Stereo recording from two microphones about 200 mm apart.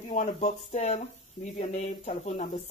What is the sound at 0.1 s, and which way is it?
Speech, 35° left (ahead or behind).